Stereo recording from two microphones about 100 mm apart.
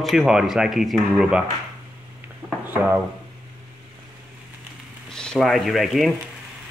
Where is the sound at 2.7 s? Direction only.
20° right (ahead or behind).